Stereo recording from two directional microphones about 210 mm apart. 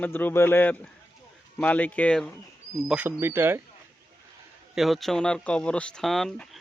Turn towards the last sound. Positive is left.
turn(degrees=0)  # may be behind; listen again after turning